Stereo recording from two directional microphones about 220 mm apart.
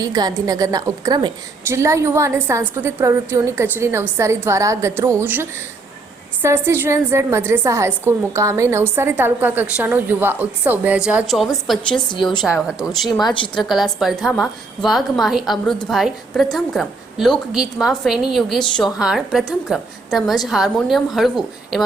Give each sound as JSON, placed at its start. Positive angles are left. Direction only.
{"t": 0.0, "sound": "a woman's voice", "side_deg": -15}
{"t": 13.2, "sound": "a woman's voice", "side_deg": 20}
{"t": 13.6, "sound": "a woman's voice", "side_deg": 0}